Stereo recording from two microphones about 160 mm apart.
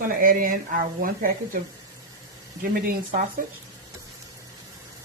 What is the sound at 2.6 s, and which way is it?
Speech, 60° right (ahead or behind).